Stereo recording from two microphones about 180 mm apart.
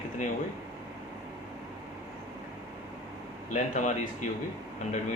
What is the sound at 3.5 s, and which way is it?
Speech, 45° left (ahead or behind).